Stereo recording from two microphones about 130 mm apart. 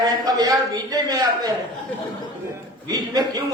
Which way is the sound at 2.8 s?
30° right (ahead or behind).